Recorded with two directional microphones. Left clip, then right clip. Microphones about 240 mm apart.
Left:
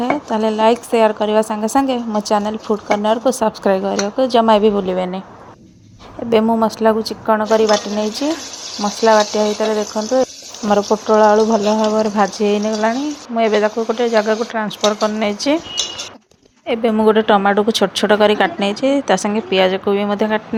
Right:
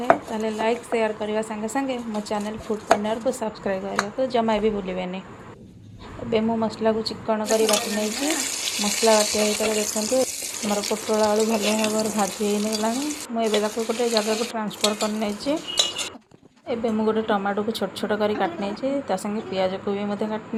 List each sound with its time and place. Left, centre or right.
0.3 s a woman's voice: left
6.3 s a woman's voice: left
8.8 s a woman's voice: left
10.7 s a woman's voice: left
11.1 s a woman's voice: left
16.6 s a woman's voice: left